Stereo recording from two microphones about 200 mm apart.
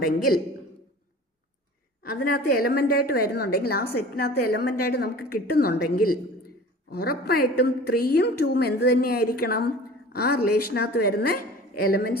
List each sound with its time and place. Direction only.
2.0 s a woman's voice: 50° left (ahead or behind)